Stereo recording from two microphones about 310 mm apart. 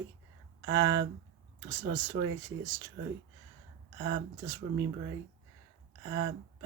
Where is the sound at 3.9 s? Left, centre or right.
Right.